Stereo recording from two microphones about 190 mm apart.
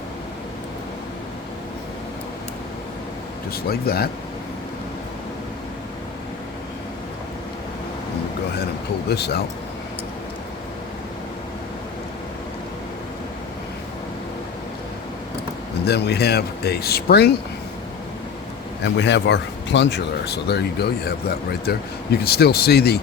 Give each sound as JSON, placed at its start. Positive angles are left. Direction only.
{"t": 3.5, "sound": "speech", "side_deg": 55}
{"t": 9.0, "sound": "speech", "side_deg": 60}
{"t": 15.9, "sound": "speech", "side_deg": 60}
{"t": 18.8, "sound": "speech", "side_deg": 65}